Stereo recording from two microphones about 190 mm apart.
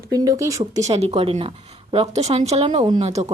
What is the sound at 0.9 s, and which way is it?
Speech, 30° right (ahead or behind).